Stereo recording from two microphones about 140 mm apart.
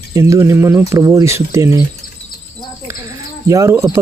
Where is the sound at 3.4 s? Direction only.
20° right (ahead or behind).